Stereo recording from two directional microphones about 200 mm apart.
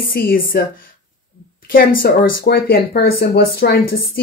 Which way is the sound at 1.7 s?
45° left (ahead or behind).